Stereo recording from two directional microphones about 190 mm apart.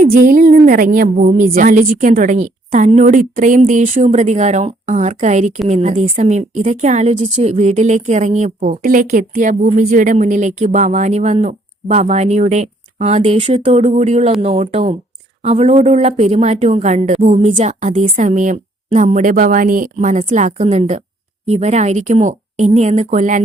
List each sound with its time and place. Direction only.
0.0 s speech: 45° right (ahead or behind)